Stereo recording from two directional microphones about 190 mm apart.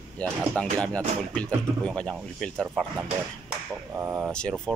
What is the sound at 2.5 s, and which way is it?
Speech, 10° right (ahead or behind).